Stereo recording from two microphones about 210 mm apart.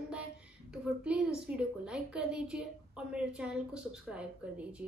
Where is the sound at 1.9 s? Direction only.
5° right (ahead or behind).